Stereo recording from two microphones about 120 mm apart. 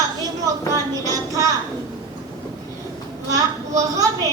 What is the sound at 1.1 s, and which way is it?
Speech, 30° right (ahead or behind).